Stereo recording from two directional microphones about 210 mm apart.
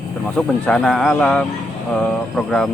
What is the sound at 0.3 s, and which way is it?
Speech, 5° left (ahead or behind).